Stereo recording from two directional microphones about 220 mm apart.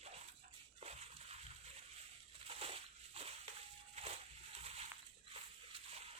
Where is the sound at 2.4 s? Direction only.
25° right (ahead or behind).